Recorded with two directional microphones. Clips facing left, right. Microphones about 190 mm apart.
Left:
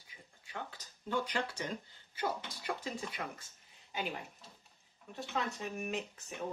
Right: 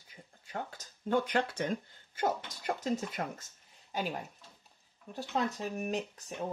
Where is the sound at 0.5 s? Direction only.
45° right (ahead or behind).